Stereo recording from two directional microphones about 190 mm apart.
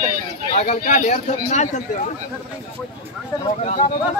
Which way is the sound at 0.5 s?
40° left (ahead or behind).